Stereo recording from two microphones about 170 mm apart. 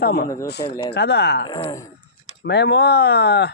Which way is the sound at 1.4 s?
20° left (ahead or behind).